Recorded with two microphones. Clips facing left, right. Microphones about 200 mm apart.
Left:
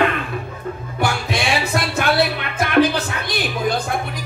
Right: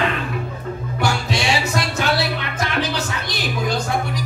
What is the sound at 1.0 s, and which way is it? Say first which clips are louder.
Music: even; 55° left (ahead or behind).